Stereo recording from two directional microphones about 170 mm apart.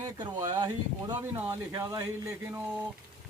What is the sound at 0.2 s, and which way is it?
Speech, 25° right (ahead or behind).